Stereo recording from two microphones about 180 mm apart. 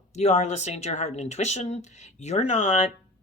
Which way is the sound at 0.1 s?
40° left (ahead or behind).